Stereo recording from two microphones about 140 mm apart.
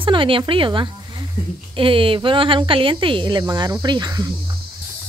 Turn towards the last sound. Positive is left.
turn(degrees=-30)  # may be behind; listen again after turning